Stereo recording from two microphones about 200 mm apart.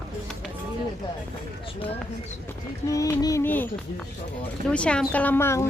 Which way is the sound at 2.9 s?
15° left (ahead or behind).